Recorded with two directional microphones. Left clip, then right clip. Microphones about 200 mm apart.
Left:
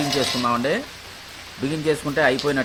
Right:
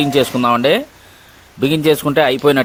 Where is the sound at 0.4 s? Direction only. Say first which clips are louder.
Right 8 dB; 50° right (ahead or behind).